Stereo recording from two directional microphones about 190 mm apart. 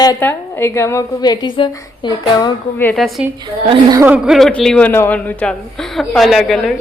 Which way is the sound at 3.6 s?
20° right (ahead or behind).